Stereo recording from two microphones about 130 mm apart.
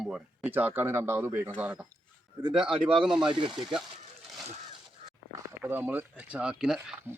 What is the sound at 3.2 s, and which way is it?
Speech, 40° right (ahead or behind).